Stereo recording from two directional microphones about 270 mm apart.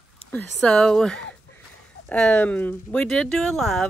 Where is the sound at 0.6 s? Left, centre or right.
Centre.